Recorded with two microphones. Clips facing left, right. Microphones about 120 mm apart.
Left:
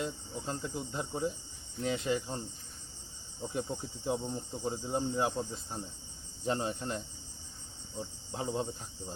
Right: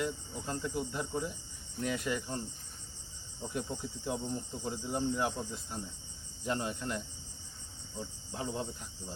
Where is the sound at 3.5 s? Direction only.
25° left (ahead or behind).